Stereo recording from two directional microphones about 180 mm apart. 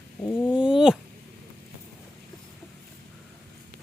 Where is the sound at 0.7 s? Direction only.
5° right (ahead or behind).